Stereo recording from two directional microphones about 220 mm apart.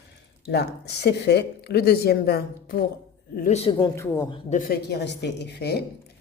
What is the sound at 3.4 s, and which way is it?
Speech, 25° left (ahead or behind).